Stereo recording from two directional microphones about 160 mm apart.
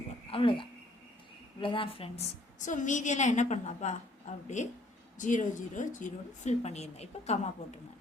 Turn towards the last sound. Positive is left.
turn(degrees=40)  # may be behind; listen again after turning